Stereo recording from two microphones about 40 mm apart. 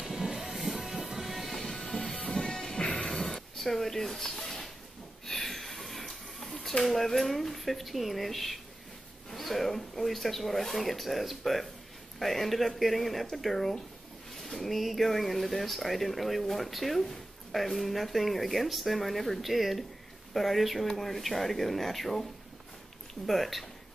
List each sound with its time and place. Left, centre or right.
0.0 s music: centre
1.6 s music: centre
2.2 s smash: centre
3.0 s a sound: centre
6.8 s speech: centre
23.2 s speech: centre